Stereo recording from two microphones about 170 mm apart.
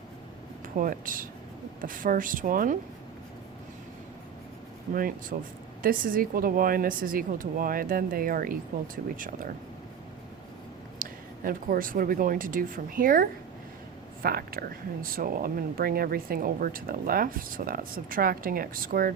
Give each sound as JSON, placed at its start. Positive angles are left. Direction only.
{"t": 0.8, "sound": "speech", "side_deg": -55}
{"t": 4.9, "sound": "speech", "side_deg": -55}
{"t": 11.0, "sound": "speech", "side_deg": -55}